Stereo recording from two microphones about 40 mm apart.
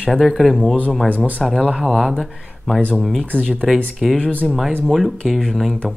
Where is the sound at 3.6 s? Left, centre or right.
Centre.